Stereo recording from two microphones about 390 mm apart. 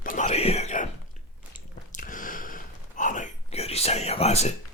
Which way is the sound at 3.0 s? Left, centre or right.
Centre.